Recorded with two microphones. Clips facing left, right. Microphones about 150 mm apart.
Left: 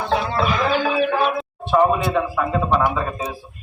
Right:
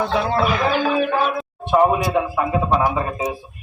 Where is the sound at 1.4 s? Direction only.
5° right (ahead or behind).